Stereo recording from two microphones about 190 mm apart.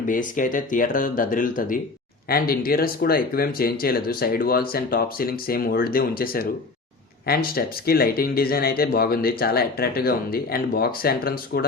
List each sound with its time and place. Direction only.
0.1 s speech: 45° left (ahead or behind)